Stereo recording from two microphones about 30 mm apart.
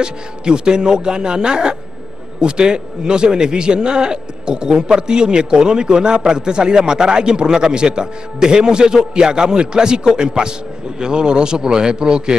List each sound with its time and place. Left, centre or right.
0.0 s a man's voice: right